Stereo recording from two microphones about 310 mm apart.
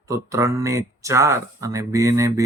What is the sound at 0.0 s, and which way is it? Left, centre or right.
Speech, centre.